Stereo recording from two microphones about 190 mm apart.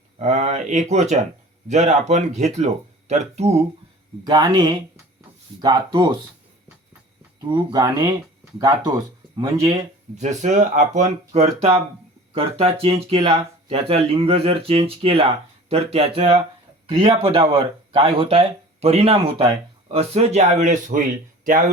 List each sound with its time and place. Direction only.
0.2 s speech: 35° right (ahead or behind)
4.2 s speech: 20° right (ahead or behind)
7.4 s speech: 20° right (ahead or behind)
10.2 s speech: 40° right (ahead or behind)